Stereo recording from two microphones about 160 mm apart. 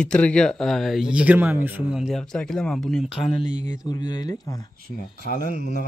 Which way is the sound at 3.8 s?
25° left (ahead or behind).